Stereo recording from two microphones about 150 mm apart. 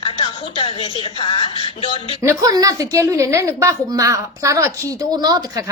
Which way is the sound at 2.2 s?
20° right (ahead or behind).